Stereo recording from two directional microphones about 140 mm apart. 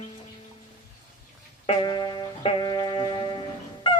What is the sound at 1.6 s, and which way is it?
Music, 40° left (ahead or behind).